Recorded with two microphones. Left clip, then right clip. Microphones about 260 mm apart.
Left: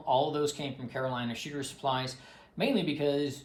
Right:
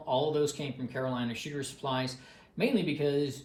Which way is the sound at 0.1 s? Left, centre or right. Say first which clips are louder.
Left 1 dB; centre.